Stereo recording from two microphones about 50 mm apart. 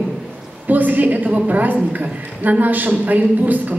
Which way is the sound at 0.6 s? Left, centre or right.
Right.